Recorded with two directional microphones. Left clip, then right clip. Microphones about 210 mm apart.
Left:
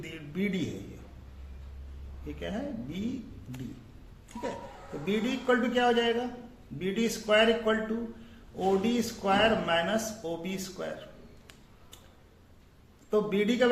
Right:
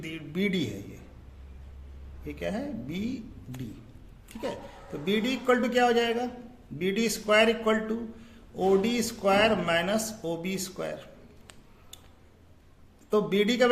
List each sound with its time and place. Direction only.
0.0 s a man's voice: 40° right (ahead or behind)
2.2 s a man's voice: 45° right (ahead or behind)
5.0 s a man's voice: 45° right (ahead or behind)
13.1 s speech: 40° right (ahead or behind)